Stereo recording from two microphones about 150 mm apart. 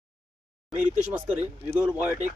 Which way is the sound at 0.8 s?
10° right (ahead or behind).